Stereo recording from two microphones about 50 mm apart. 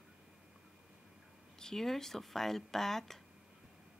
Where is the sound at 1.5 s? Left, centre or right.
Centre.